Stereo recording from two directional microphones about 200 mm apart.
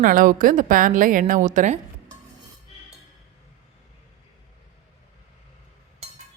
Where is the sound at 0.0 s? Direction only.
45° right (ahead or behind).